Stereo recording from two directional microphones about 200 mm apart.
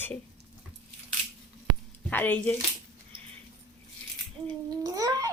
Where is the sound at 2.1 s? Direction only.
10° left (ahead or behind).